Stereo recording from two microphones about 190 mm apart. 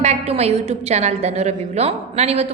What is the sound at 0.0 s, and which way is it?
A woman's voice, 35° right (ahead or behind).